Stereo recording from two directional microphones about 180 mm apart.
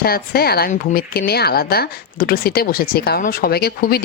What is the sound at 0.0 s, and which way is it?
Speech, 55° left (ahead or behind).